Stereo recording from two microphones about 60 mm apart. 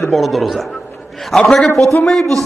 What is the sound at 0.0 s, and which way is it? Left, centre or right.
A man's voice, centre.